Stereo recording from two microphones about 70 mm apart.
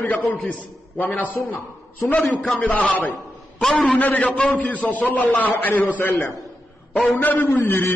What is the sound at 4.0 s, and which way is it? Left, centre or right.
A man's voice, left.